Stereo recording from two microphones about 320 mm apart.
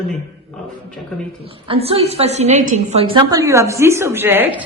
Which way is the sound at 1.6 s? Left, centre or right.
Centre.